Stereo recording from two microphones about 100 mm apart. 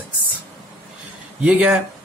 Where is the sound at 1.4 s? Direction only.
15° right (ahead or behind).